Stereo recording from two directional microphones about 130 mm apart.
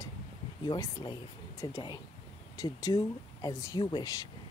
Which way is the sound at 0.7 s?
35° left (ahead or behind).